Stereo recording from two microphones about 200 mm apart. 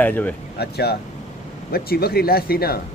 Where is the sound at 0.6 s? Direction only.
55° left (ahead or behind).